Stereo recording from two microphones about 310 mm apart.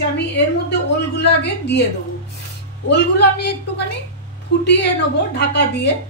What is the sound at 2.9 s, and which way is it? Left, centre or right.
A woman's voice, left.